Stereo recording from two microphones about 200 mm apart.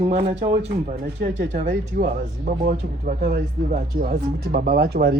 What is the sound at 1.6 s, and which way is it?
Speech, 45° right (ahead or behind).